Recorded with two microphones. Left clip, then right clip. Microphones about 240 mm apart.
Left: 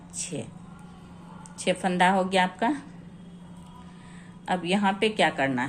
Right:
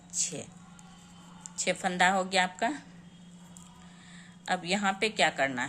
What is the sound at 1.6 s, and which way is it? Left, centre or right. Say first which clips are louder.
Speech: left 3 dB; centre.